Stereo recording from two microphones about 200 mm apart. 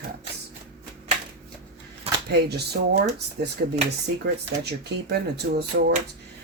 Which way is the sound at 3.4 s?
45° right (ahead or behind).